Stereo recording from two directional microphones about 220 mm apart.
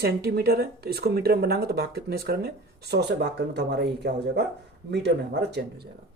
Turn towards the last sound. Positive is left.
turn(degrees=-50)  # may be behind; listen again after turning